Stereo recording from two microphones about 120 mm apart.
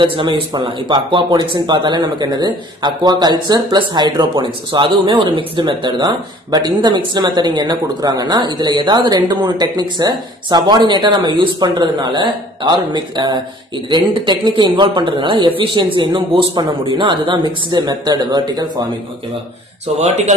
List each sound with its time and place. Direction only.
0.0 s speech: 45° right (ahead or behind)
20.0 s speech: 65° right (ahead or behind)